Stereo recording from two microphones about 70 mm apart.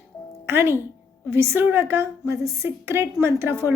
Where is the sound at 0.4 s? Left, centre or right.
Right.